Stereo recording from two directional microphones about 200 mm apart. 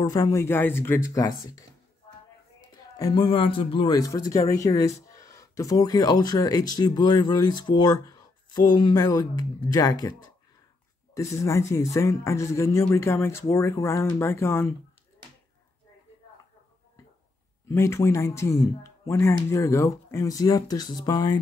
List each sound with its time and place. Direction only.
0.0 s speech: 20° left (ahead or behind)
3.0 s speech: 20° left (ahead or behind)
11.1 s speech: 15° left (ahead or behind)
17.6 s speech: 15° left (ahead or behind)